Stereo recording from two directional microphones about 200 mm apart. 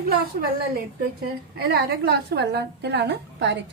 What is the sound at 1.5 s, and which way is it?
A woman's voice, 55° right (ahead or behind).